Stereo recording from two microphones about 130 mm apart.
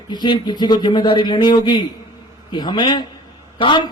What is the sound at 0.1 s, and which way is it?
A man's voice, 35° left (ahead or behind).